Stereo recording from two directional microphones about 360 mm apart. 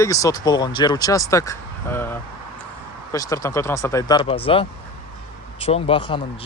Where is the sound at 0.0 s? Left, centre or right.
Centre.